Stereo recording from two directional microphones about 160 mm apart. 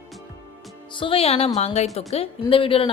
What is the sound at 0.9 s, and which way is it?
A woman's voice, 30° left (ahead or behind).